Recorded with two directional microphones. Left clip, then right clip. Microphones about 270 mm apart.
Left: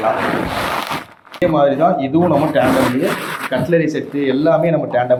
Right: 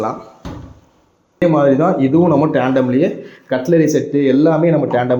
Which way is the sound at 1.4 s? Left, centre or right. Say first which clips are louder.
Right 1 dB; right.